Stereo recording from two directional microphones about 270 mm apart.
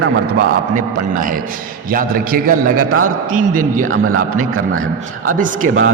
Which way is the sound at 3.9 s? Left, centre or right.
Right.